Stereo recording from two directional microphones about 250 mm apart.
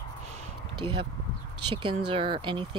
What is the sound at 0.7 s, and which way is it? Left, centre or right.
Speech, centre.